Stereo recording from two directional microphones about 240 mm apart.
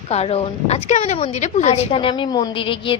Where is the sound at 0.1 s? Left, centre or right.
Left.